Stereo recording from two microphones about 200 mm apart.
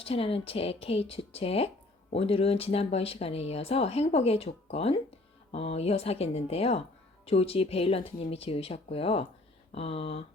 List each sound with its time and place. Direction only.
0.0 s speech: 30° left (ahead or behind)